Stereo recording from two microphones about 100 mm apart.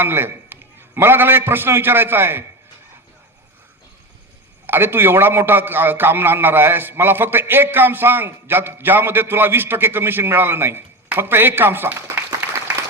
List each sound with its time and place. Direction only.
0.0 s a man's voice: 20° right (ahead or behind)
4.6 s a man's voice: 20° right (ahead or behind)